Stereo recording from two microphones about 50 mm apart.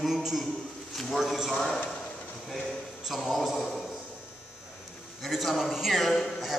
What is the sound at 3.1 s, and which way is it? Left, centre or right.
Speech, centre.